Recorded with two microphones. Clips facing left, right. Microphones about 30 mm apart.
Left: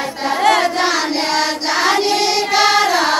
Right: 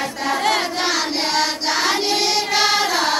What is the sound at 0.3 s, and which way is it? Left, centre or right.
Child singing, centre.